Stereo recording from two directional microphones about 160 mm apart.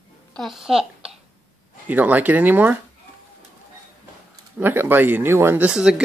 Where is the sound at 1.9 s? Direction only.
10° right (ahead or behind).